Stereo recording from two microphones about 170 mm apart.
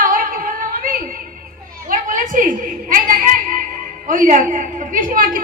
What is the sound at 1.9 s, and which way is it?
A woman's voice, 50° right (ahead or behind).